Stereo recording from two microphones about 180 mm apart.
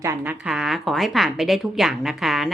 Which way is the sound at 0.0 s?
10° right (ahead or behind).